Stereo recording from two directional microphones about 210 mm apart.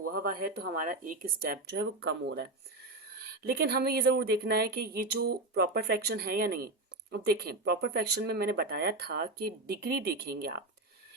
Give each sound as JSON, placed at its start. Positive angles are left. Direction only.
{"t": 0.1, "sound": "a woman's voice", "side_deg": -45}